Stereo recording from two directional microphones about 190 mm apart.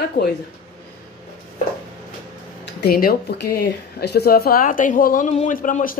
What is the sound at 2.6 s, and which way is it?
Speech, 55° left (ahead or behind).